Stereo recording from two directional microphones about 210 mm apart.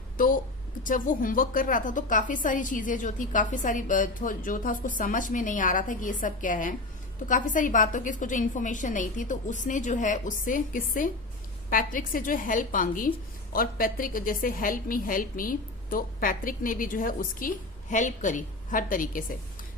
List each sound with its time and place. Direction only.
0.2 s a woman's voice: 40° left (ahead or behind)